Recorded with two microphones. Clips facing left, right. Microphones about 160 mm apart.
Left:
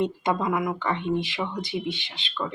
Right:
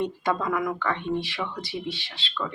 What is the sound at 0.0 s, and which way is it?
Speech, 20° left (ahead or behind).